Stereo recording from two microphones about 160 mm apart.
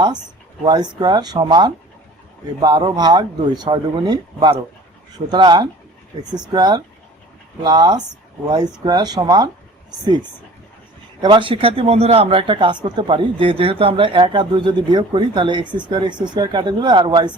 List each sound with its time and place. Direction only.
0.6 s a man's voice: 30° right (ahead or behind)